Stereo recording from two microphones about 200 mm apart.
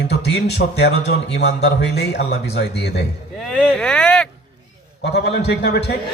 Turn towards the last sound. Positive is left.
turn(degrees=55)  # may be behind; listen again after turning